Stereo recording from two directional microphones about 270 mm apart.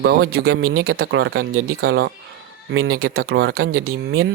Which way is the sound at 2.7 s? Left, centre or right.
Right.